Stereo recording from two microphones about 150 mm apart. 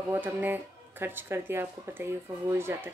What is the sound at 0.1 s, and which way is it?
Speech, 10° right (ahead or behind).